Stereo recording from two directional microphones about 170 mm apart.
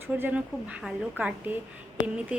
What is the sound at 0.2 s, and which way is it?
A woman's voice, 10° right (ahead or behind).